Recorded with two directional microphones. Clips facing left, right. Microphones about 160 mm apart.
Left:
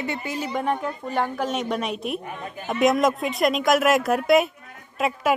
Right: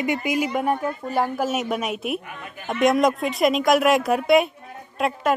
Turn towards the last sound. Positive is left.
turn(degrees=0)  # may be behind; listen again after turning